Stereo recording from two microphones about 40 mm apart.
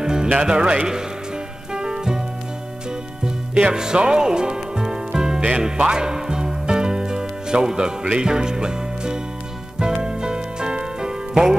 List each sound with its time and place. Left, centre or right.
0.0 s music: centre
0.4 s speech: right
1.7 s music: centre
3.3 s music: right